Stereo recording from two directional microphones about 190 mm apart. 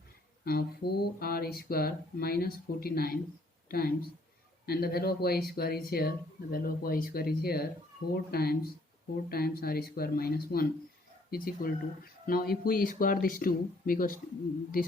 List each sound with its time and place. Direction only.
0.4 s speech: 55° left (ahead or behind)